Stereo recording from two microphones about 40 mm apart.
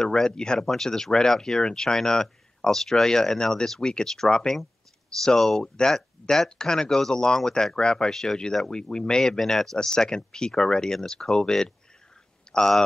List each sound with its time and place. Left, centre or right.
0.0 s speech: centre
9.8 s speech: centre